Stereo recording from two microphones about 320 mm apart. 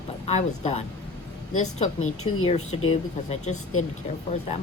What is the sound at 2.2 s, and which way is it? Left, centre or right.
Speech, centre.